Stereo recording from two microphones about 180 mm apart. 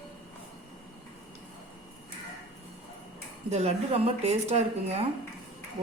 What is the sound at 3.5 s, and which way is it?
Speech, 35° right (ahead or behind).